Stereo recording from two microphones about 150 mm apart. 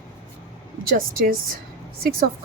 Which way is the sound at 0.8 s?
75° right (ahead or behind).